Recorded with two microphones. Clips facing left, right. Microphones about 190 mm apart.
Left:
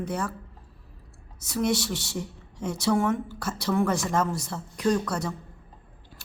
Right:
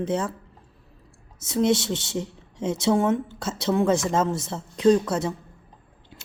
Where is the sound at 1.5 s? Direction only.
25° right (ahead or behind).